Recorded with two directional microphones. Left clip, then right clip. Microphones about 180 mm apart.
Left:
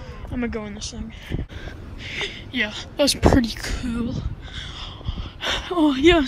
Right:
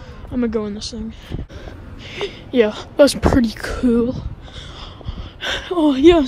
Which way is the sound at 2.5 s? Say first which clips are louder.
Right 11 dB; 35° right (ahead or behind).